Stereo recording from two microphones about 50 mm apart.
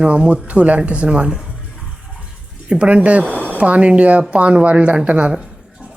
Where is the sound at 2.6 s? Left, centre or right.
Right.